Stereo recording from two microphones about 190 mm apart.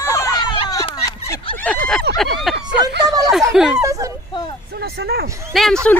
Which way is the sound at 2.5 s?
60° right (ahead or behind).